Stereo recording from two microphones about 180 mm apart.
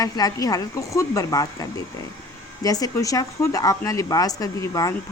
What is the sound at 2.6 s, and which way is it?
A woman's voice, 20° left (ahead or behind).